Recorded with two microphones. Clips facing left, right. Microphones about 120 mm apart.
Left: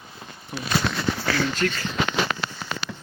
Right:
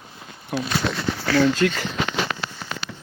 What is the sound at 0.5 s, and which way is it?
Speech, 75° right (ahead or behind).